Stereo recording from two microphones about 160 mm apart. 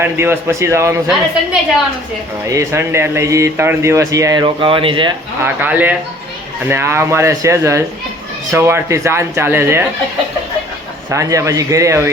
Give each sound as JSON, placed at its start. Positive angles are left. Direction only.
{"t": 0.0, "sound": "speech", "side_deg": -15}
{"t": 2.5, "sound": "speech", "side_deg": -20}
{"t": 4.4, "sound": "speech", "side_deg": -35}
{"t": 5.4, "sound": "speech", "side_deg": -10}
{"t": 11.1, "sound": "speech", "side_deg": -20}